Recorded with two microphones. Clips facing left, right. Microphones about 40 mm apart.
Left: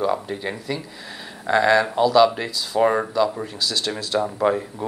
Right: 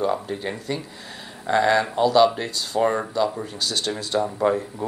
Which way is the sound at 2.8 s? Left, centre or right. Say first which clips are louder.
Left 3 dB; centre.